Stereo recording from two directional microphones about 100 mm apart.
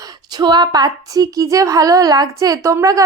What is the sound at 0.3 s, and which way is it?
A woman's voice, 45° right (ahead or behind).